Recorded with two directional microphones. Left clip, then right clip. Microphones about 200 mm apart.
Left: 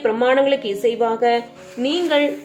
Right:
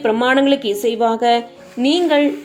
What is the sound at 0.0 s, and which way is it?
A woman's voice, 45° right (ahead or behind).